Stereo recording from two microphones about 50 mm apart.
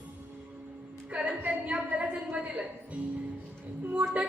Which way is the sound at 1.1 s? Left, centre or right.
Right.